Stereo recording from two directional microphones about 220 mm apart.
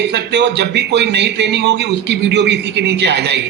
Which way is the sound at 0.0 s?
50° right (ahead or behind).